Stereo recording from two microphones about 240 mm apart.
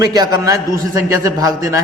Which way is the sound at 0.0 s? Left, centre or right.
Centre.